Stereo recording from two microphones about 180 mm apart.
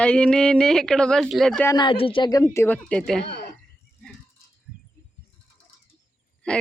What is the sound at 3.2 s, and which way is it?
Speech, 70° left (ahead or behind).